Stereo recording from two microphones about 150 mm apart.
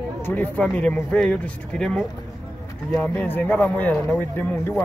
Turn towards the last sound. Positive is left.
turn(degrees=10)  # may be behind; listen again after turning